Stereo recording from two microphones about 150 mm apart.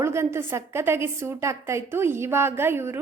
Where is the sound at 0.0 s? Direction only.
15° right (ahead or behind).